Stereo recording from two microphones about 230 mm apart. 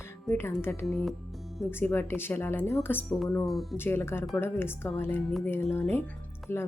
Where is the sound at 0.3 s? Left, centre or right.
Centre.